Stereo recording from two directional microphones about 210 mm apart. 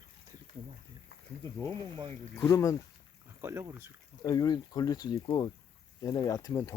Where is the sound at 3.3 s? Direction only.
15° right (ahead or behind).